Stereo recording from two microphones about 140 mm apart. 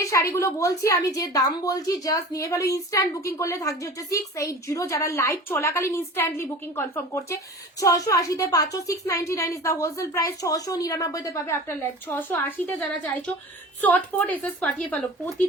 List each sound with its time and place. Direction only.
0.1 s a woman's voice: 20° left (ahead or behind)